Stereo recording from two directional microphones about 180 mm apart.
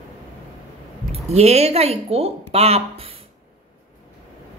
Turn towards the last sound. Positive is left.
turn(degrees=-35)  # may be behind; listen again after turning